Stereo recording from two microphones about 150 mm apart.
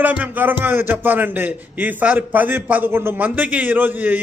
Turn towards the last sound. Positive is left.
turn(degrees=-10)  # may be behind; listen again after turning